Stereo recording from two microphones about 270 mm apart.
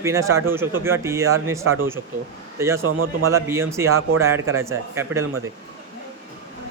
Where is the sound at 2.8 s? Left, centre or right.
Right.